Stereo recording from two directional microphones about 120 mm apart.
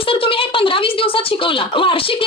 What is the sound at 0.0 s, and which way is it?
A woman's voice, 50° left (ahead or behind).